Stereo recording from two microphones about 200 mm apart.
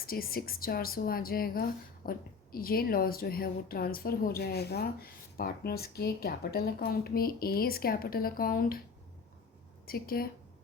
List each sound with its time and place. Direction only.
0.0 s speech: 50° left (ahead or behind)
9.8 s a woman's voice: 50° left (ahead or behind)